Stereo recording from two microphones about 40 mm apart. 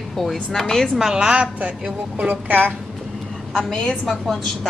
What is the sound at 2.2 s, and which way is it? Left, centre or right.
Speech, right.